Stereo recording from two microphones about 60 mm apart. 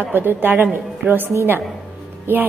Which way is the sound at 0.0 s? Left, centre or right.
Right.